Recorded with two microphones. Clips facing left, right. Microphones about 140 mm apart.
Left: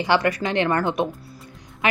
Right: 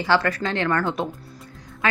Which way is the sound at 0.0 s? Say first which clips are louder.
Left 1 dB; 15° left (ahead or behind).